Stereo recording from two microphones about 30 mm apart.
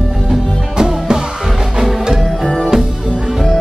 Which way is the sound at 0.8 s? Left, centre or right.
Right.